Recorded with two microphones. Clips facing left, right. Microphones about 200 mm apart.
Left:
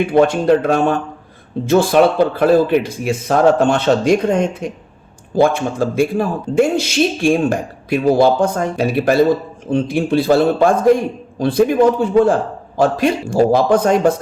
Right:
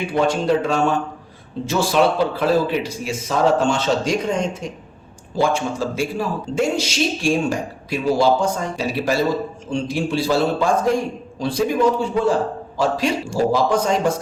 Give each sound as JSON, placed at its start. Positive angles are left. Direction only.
{"t": 0.1, "sound": "a man's voice", "side_deg": 55}